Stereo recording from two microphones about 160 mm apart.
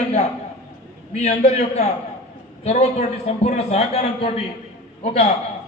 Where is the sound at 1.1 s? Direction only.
45° left (ahead or behind).